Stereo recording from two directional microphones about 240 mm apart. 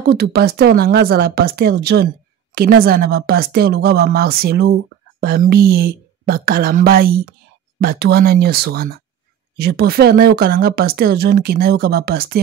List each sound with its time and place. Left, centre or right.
0.0 s a woman's voice: right